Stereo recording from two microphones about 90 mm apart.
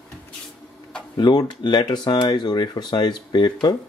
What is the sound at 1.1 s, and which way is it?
Speech, 55° left (ahead or behind).